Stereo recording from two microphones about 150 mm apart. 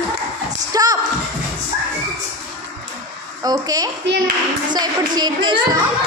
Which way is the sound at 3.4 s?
25° right (ahead or behind).